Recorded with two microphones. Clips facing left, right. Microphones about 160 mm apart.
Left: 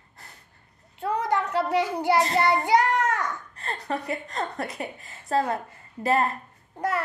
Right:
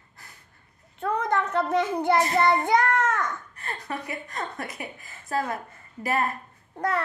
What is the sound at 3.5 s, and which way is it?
A woman's voice, 30° left (ahead or behind).